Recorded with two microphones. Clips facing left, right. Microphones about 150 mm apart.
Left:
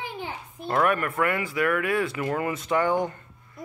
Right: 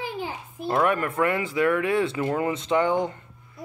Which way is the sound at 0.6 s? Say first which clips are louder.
Right 1 dB; 15° right (ahead or behind).